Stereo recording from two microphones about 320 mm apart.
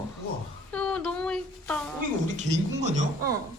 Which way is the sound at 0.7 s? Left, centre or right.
Centre.